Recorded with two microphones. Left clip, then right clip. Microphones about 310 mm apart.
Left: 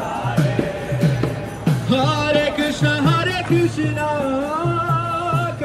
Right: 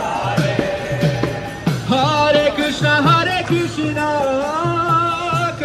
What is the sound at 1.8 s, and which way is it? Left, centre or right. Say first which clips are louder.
Music: right 4 dB; centre.